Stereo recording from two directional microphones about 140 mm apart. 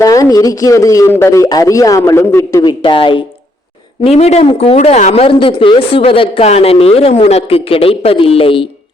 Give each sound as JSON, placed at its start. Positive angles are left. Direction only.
{"t": 0.0, "sound": "a man's voice", "side_deg": 25}
{"t": 2.8, "sound": "speech", "side_deg": 35}
{"t": 4.0, "sound": "speech", "side_deg": 45}